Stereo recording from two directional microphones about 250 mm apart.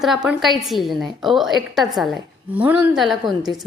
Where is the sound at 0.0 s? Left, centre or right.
Centre.